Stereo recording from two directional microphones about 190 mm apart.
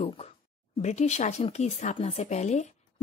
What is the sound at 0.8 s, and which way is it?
Speech, 35° left (ahead or behind).